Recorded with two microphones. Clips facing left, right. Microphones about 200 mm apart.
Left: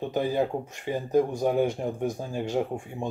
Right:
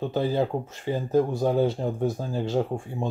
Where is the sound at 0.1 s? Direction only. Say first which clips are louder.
Even; 15° left (ahead or behind).